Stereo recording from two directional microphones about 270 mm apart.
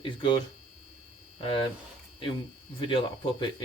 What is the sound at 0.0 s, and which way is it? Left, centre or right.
Speech, centre.